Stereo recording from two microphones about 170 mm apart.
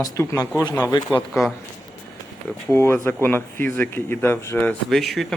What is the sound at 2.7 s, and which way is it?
Speech, 15° left (ahead or behind).